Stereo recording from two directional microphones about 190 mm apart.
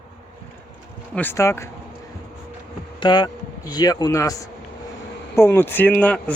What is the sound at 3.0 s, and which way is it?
Speech, 25° left (ahead or behind).